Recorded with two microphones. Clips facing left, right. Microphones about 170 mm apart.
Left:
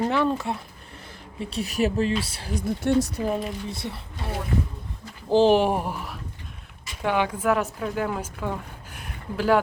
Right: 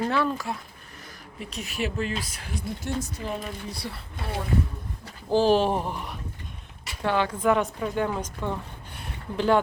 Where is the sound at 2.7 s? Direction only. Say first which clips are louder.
Left 10 dB; 60° left (ahead or behind).